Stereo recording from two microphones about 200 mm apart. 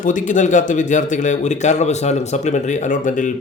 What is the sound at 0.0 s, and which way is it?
A man's voice, 40° left (ahead or behind).